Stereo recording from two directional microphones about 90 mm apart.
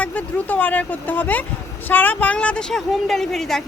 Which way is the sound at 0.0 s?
20° left (ahead or behind).